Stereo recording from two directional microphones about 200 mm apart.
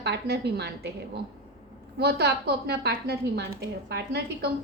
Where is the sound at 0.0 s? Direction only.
55° right (ahead or behind).